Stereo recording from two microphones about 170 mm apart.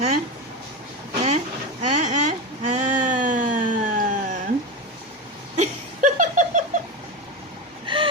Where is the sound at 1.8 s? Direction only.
45° right (ahead or behind).